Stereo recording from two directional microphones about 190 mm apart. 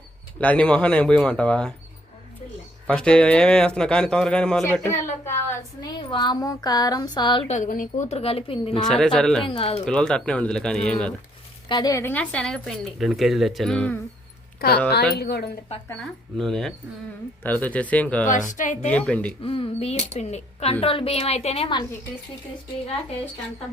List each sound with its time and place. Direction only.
0.3 s a woman's voice: 5° left (ahead or behind)
2.8 s a woman's voice: 5° left (ahead or behind)
6.0 s speech: 25° left (ahead or behind)
7.5 s speech: 45° left (ahead or behind)
8.1 s speech: 30° left (ahead or behind)
8.9 s a woman's voice: 5° left (ahead or behind)
9.5 s speech: 30° left (ahead or behind)
9.8 s a woman's voice: 5° left (ahead or behind)
11.7 s a woman's voice: 20° left (ahead or behind)
14.6 s speech: 50° left (ahead or behind)
15.9 s a woman's voice: 5° left (ahead or behind)
18.3 s speech: 45° left (ahead or behind)
18.9 s speech: 5° left (ahead or behind)
19.4 s speech: 30° left (ahead or behind)